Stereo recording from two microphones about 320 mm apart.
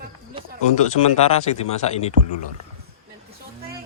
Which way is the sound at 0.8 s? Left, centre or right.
Centre.